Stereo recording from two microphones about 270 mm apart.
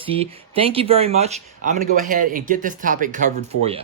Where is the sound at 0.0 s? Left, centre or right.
Right.